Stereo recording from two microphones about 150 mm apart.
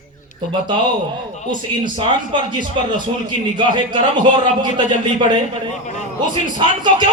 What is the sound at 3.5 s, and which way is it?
Speech, 30° right (ahead or behind).